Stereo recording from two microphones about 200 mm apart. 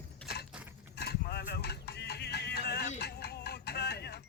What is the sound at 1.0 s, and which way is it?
Clip-clop, 55° left (ahead or behind).